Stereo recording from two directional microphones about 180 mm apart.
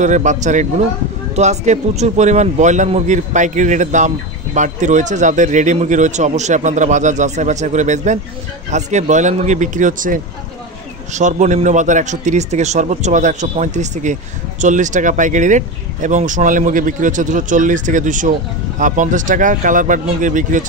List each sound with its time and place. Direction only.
0.0 s speech: 40° right (ahead or behind)